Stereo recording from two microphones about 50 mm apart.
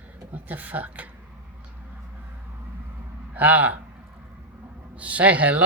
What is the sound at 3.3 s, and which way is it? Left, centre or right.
Speech, right.